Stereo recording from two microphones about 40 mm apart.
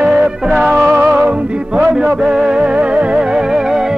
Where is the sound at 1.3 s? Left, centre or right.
Right.